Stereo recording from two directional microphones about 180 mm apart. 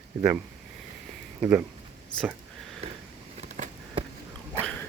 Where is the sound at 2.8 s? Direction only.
35° right (ahead or behind).